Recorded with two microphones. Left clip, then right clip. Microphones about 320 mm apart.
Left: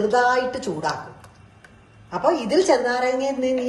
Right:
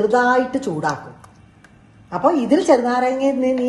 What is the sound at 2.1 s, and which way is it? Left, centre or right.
A woman's voice, centre.